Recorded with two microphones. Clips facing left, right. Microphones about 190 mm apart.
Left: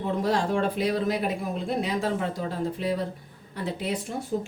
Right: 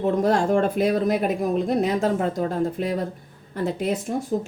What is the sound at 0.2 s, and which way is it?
Speech, 50° right (ahead or behind).